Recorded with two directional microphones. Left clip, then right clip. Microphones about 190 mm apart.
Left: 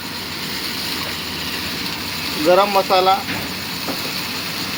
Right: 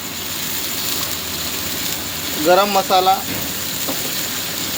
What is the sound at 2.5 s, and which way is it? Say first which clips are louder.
Speech: even; 20° right (ahead or behind).